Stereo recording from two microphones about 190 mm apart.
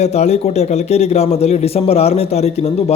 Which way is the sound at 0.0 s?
35° left (ahead or behind).